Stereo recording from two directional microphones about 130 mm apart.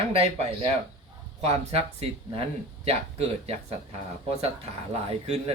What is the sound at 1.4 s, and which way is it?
Speech, 50° right (ahead or behind).